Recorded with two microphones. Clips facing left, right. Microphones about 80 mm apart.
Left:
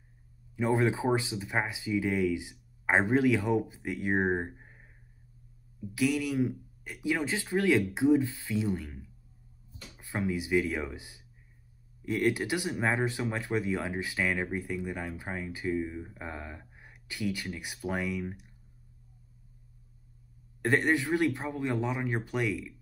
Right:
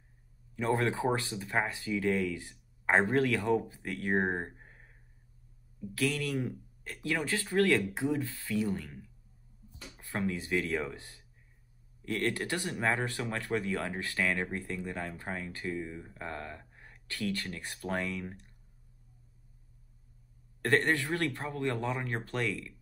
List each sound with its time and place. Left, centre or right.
0.6 s speech: centre
5.9 s speech: centre
20.6 s speech: centre